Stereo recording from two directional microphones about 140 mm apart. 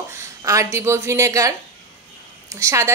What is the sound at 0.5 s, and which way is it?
Speech, 20° right (ahead or behind).